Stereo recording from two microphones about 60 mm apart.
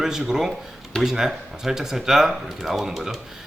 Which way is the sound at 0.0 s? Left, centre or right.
Centre.